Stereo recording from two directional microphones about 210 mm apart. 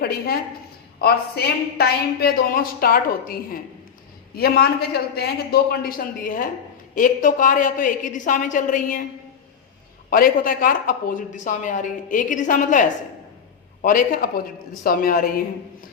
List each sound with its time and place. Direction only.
1.0 s a woman's voice: 50° left (ahead or behind)
10.1 s speech: 45° left (ahead or behind)
13.8 s a woman's voice: 40° left (ahead or behind)